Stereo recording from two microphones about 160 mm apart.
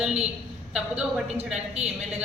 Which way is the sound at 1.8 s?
45° right (ahead or behind).